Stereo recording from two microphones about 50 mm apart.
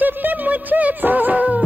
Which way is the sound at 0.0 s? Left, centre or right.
Right.